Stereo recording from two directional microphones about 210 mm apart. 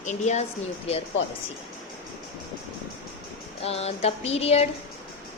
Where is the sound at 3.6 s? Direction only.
30° left (ahead or behind).